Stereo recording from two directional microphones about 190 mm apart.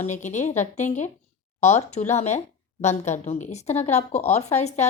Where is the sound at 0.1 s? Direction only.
40° left (ahead or behind).